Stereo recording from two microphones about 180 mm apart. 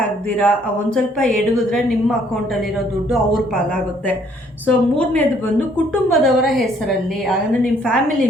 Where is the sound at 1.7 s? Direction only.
Centre (ahead or behind).